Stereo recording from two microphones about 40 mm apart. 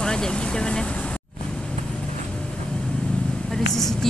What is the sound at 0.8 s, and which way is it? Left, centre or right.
Vehicle, left.